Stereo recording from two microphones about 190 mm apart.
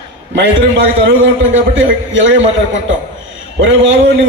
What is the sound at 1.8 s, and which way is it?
Speech, 75° right (ahead or behind).